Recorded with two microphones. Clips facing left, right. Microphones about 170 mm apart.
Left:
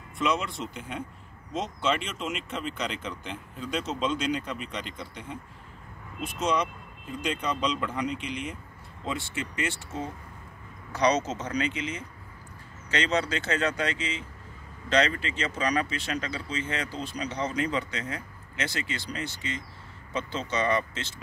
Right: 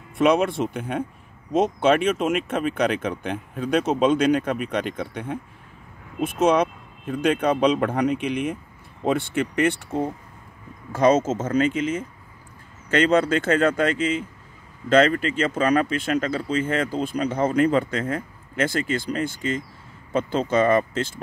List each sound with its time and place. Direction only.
0.2 s speech: 60° right (ahead or behind)